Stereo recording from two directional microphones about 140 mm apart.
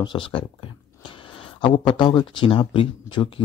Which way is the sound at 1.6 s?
35° left (ahead or behind).